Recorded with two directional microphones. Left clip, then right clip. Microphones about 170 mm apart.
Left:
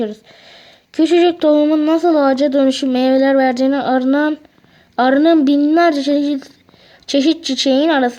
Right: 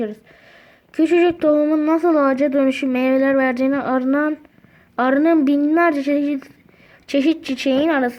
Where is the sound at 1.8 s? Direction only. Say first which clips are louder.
Left 3 dB; 15° left (ahead or behind).